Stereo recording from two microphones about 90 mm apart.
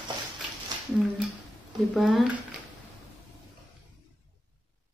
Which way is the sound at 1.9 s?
5° right (ahead or behind).